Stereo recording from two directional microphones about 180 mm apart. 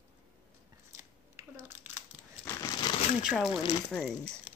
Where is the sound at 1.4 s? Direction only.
15° right (ahead or behind).